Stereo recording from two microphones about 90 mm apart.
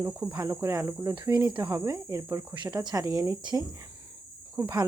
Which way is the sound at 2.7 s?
45° right (ahead or behind).